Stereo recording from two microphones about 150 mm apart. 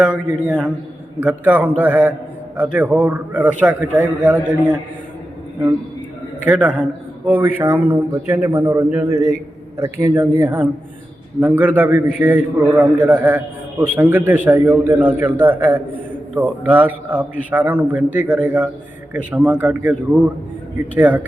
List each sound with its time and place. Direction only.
0.0 s a man's voice: 5° right (ahead or behind)
6.4 s a man's voice: 10° right (ahead or behind)